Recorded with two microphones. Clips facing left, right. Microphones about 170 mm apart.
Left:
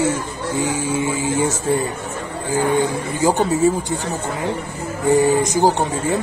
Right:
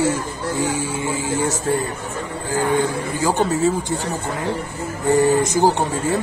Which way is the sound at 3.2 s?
15° left (ahead or behind).